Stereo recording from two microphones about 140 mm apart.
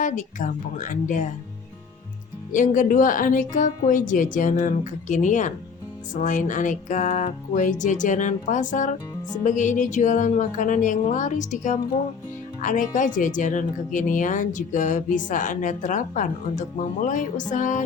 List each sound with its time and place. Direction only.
0.0 s music: 65° left (ahead or behind)
2.5 s speech: 70° left (ahead or behind)
6.1 s music: 65° left (ahead or behind)
12.6 s speech: 70° left (ahead or behind)
17.5 s music: 65° left (ahead or behind)